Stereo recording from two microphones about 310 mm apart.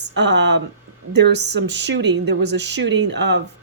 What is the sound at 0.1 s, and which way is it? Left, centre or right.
A woman's voice, right.